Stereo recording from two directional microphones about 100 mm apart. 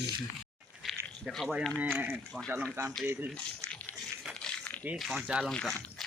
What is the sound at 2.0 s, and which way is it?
Speech, 20° right (ahead or behind).